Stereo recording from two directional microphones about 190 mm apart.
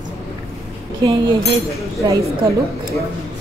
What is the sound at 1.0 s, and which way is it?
Speech, 25° right (ahead or behind).